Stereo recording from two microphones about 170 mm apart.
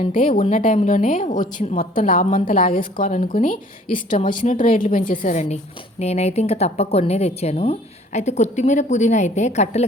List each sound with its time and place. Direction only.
0.0 s a woman's voice: 55° left (ahead or behind)